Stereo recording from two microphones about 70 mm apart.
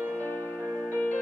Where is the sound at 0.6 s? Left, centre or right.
Right.